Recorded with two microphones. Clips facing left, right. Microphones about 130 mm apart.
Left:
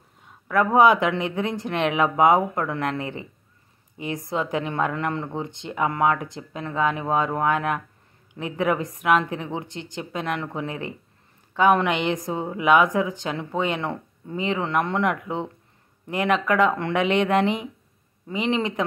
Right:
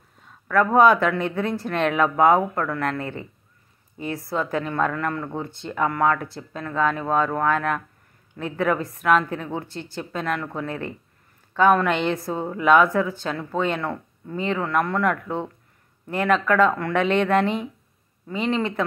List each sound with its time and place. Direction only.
0.2 s speech: 15° left (ahead or behind)